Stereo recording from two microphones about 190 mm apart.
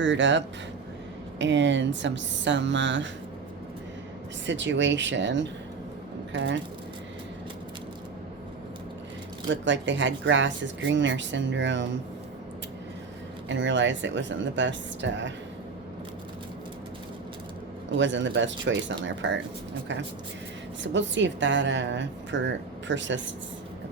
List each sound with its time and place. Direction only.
0.0 s a woman's voice: 75° right (ahead or behind)
4.4 s a woman's voice: 70° right (ahead or behind)
9.5 s a woman's voice: 75° right (ahead or behind)
13.5 s a woman's voice: 75° right (ahead or behind)
17.9 s a woman's voice: 75° right (ahead or behind)
20.8 s a woman's voice: 70° right (ahead or behind)